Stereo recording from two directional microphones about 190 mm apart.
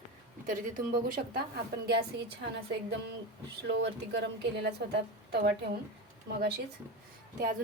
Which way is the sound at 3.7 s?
65° right (ahead or behind).